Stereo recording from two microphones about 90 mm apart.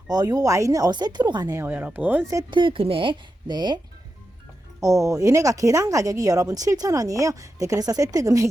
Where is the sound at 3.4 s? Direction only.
55° right (ahead or behind).